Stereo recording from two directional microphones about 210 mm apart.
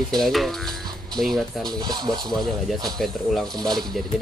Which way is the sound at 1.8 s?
20° right (ahead or behind).